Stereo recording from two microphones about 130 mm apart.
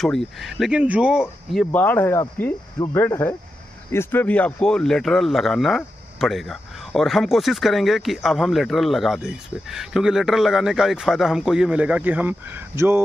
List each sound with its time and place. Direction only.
0.4 s speech: centre (ahead or behind)
1.5 s speech: 10° left (ahead or behind); by 13.0 s 20° right (ahead or behind)